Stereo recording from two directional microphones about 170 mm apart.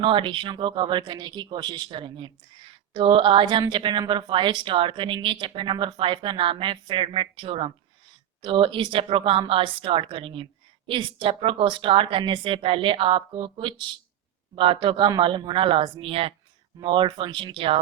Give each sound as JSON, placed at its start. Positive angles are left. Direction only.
{"t": 0.0, "sound": "a woman's voice", "side_deg": -30}